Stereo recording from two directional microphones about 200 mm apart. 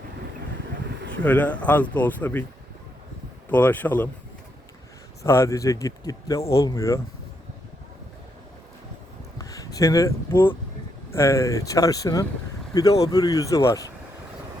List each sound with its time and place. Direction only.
1.2 s speech: 5° left (ahead or behind)
3.5 s speech: 10° left (ahead or behind)
5.2 s speech: 15° left (ahead or behind)
9.4 s speech: 15° left (ahead or behind)